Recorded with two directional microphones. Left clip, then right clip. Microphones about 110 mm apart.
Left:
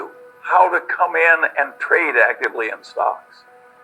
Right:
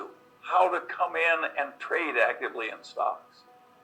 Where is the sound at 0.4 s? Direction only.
45° right (ahead or behind).